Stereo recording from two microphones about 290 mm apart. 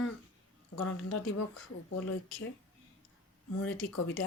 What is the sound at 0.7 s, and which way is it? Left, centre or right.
Speech, left.